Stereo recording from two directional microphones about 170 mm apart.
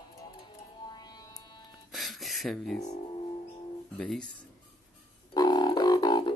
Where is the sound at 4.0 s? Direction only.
5° left (ahead or behind).